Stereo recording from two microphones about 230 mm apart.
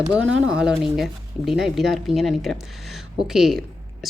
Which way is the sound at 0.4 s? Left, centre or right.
Centre.